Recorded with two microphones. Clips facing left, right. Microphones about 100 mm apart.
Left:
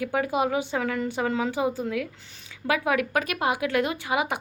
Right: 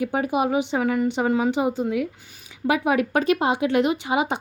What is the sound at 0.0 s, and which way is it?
Speech, 20° right (ahead or behind).